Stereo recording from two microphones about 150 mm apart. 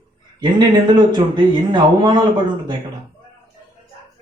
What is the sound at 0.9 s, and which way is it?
A man's voice, 30° right (ahead or behind).